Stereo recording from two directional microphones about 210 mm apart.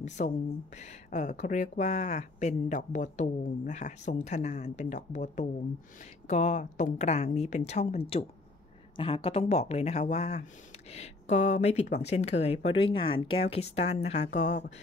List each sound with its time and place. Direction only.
0.0 s speech: 35° left (ahead or behind)